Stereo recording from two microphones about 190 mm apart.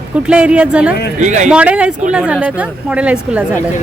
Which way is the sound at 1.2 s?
40° right (ahead or behind).